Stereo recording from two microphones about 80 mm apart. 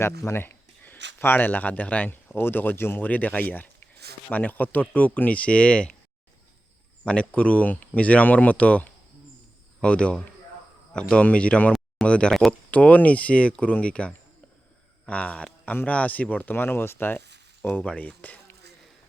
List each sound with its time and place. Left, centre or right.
0.0 s speech: left; by 6.0 s centre
7.0 s speech: centre